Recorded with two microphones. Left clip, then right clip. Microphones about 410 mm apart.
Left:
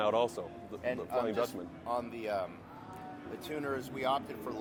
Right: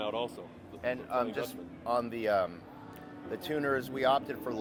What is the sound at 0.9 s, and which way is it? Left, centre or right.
Speech, right.